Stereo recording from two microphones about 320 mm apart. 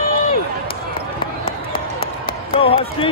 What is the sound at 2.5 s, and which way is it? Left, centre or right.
Basketball bounce, centre.